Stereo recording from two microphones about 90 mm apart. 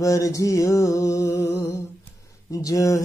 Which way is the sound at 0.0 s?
40° left (ahead or behind).